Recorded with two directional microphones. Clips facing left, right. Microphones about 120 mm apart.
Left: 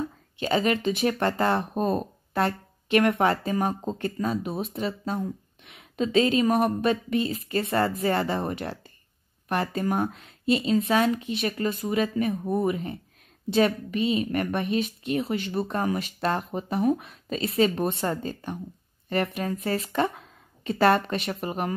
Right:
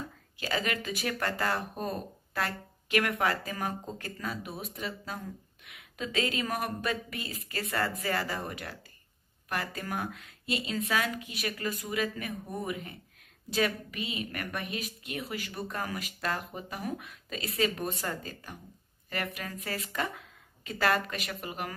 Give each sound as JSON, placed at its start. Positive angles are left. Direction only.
{"t": 0.4, "sound": "speech", "side_deg": 25}